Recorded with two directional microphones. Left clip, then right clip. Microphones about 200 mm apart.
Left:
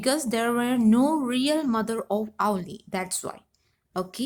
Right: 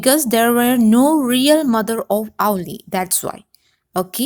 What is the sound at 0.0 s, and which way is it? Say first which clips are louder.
A woman's voice: right 10 dB; 35° right (ahead or behind).